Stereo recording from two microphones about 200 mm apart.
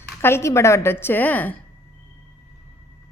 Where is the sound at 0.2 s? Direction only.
10° left (ahead or behind).